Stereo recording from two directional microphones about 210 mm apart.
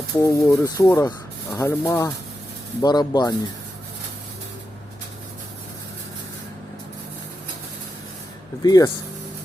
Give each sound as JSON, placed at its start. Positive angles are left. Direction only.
{"t": 0.2, "sound": "speech", "side_deg": 15}
{"t": 8.6, "sound": "speech", "side_deg": 15}